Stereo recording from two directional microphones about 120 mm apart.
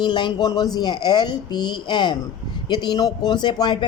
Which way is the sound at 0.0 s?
40° left (ahead or behind).